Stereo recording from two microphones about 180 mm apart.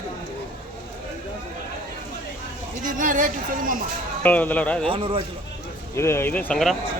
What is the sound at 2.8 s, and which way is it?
Speech, 45° right (ahead or behind).